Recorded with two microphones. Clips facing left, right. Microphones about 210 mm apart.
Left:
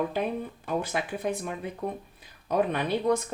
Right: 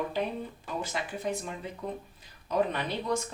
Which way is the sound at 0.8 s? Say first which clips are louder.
Even; 60° left (ahead or behind).